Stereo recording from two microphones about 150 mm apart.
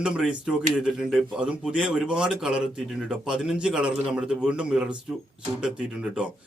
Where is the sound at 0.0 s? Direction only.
5° right (ahead or behind).